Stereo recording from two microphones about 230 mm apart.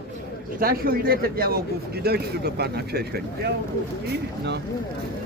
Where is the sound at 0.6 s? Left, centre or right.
Right.